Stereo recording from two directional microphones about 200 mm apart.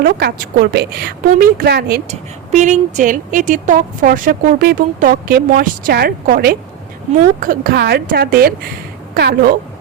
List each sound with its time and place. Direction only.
0.0 s speech: 45° right (ahead or behind)
2.0 s speech: 35° right (ahead or behind); by 9.6 s 50° right (ahead or behind)